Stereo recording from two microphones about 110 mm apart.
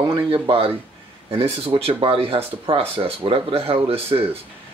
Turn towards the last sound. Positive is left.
turn(degrees=-60)  # may be behind; listen again after turning